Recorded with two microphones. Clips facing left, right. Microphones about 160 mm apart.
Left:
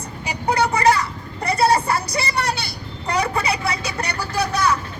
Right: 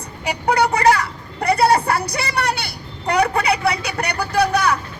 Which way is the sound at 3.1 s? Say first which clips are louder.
Right 4 dB; 65° right (ahead or behind).